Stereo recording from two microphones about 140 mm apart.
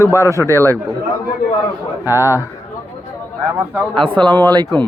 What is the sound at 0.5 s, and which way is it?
Speech, 15° left (ahead or behind).